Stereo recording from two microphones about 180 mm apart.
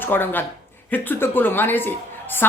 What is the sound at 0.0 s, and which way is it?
A woman's voice, 10° left (ahead or behind).